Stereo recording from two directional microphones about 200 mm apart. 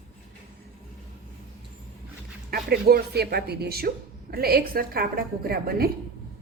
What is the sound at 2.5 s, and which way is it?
Speech, 50° right (ahead or behind).